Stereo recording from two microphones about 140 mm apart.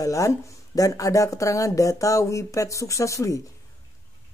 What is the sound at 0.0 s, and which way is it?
A woman's voice, 25° left (ahead or behind).